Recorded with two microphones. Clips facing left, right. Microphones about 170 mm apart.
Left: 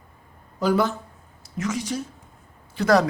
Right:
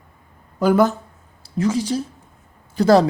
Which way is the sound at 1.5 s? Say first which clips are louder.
Right 7 dB; 30° right (ahead or behind).